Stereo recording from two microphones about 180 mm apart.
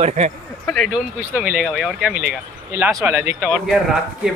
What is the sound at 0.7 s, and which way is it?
Speech, centre (ahead or behind).